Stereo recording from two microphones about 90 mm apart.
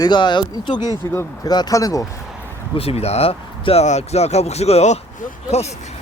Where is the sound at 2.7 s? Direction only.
90° left.